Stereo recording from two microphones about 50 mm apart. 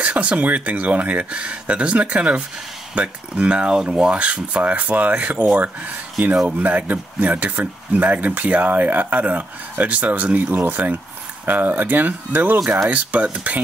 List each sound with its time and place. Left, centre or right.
0.0 s speech: right